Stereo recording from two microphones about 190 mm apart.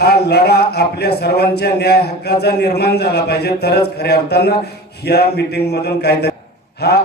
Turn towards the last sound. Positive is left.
turn(degrees=60)  # may be behind; listen again after turning